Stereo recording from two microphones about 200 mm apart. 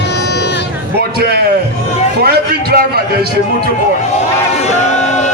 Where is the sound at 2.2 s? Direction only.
50° right (ahead or behind).